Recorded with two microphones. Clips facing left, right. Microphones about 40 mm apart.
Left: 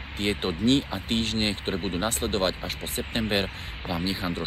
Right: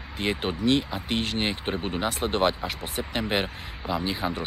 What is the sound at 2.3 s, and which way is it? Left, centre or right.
Speech, right.